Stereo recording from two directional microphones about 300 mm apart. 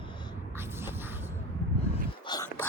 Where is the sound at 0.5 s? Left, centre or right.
Centre.